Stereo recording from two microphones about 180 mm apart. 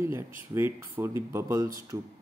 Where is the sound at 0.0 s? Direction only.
15° right (ahead or behind).